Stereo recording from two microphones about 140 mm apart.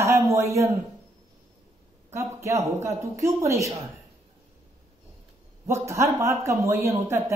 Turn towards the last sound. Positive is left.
turn(degrees=-20)  # may be behind; listen again after turning